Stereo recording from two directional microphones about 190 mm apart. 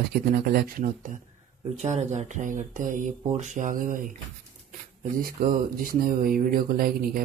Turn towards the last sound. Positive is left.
turn(degrees=-50)  # may be behind; listen again after turning